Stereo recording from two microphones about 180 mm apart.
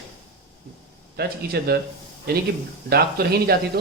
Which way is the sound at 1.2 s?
60° right (ahead or behind).